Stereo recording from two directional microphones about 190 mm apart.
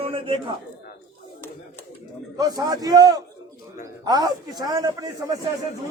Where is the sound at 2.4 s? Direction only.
20° right (ahead or behind).